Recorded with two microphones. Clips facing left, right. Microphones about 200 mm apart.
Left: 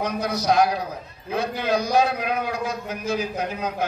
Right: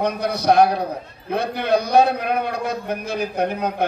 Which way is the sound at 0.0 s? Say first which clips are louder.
Right 4 dB; 60° right (ahead or behind).